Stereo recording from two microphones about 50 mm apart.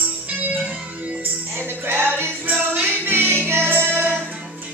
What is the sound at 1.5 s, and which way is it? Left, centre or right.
Music, right.